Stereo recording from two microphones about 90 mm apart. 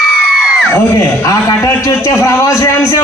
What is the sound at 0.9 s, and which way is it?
A man's voice, 35° left (ahead or behind).